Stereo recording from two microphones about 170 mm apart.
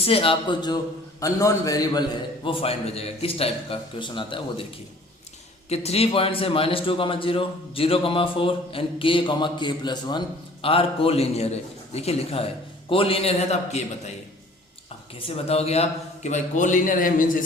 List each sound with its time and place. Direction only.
0.0 s a man's voice: 35° left (ahead or behind)
5.6 s a man's voice: 40° left (ahead or behind)
15.3 s a man's voice: 35° left (ahead or behind); by 17.4 s 50° left (ahead or behind)